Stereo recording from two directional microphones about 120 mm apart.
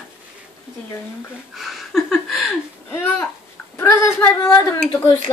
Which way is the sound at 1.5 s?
Centre (ahead or behind).